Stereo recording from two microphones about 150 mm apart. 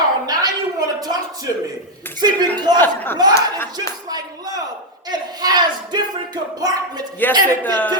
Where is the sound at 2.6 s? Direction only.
25° right (ahead or behind).